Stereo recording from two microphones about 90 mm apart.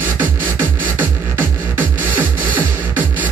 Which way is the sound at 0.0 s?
20° right (ahead or behind).